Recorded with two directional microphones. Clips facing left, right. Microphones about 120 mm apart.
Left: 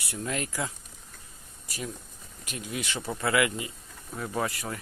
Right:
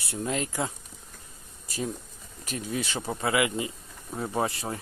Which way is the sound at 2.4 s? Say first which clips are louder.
Right 4 dB; 35° right (ahead or behind).